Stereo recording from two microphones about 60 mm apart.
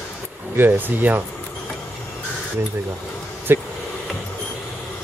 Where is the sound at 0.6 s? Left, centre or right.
Right.